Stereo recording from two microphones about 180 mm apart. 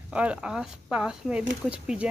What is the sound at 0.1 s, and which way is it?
Speech, 5° right (ahead or behind).